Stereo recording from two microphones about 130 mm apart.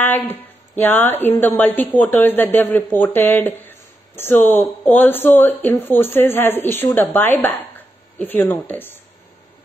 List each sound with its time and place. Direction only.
0.0 s a woman's voice: 15° left (ahead or behind)